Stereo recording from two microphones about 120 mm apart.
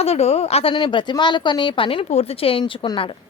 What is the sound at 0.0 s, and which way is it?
A woman's voice, 60° left (ahead or behind).